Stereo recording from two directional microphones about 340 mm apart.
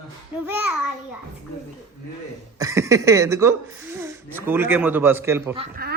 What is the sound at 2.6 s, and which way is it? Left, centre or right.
A man's voice, centre.